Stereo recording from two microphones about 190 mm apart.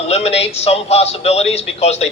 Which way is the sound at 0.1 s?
35° left (ahead or behind).